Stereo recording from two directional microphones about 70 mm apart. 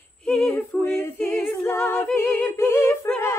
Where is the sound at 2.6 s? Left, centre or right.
Left.